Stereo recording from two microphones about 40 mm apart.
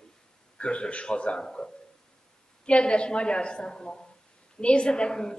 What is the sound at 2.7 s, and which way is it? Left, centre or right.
A man's voice, left.